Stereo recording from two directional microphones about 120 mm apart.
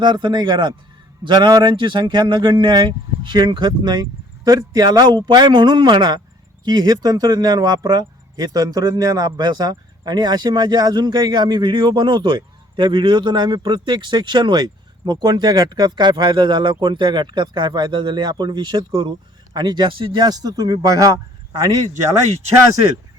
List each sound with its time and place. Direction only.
0.0 s speech: 40° right (ahead or behind)